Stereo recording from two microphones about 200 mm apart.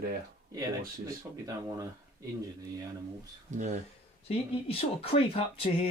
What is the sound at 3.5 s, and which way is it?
Speech, 40° right (ahead or behind).